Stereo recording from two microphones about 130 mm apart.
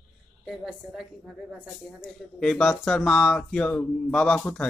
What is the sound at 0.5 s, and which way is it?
A woman's voice, 5° right (ahead or behind).